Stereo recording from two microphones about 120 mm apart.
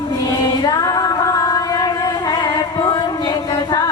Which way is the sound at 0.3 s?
35° left (ahead or behind).